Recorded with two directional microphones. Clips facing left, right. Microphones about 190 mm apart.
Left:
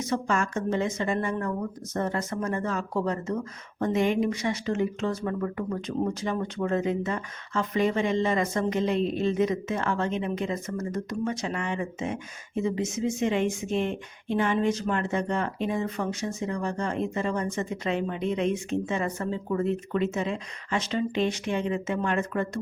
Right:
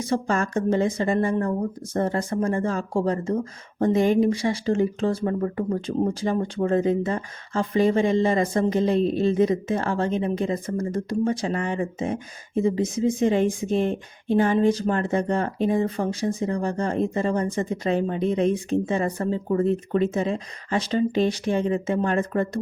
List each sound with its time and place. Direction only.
0.0 s speech: 30° right (ahead or behind)